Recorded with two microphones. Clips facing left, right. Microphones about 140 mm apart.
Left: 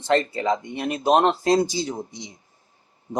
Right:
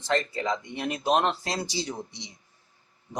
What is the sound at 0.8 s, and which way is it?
Speech, 35° left (ahead or behind).